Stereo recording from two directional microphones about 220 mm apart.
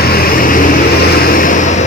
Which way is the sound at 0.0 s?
45° left (ahead or behind).